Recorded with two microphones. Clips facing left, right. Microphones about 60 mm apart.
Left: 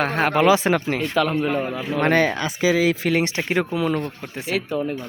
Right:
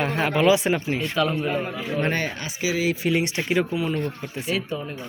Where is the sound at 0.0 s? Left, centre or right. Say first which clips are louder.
Left 2 dB; left.